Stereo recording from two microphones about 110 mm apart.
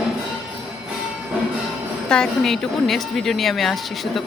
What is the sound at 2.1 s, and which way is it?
A woman's voice, 5° left (ahead or behind).